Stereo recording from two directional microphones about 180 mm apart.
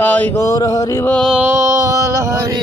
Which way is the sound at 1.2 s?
5° right (ahead or behind).